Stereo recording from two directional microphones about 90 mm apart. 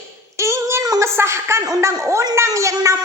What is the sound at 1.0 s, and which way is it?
A woman's voice, 30° right (ahead or behind).